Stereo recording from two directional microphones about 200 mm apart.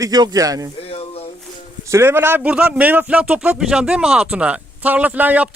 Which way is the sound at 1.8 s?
15° right (ahead or behind).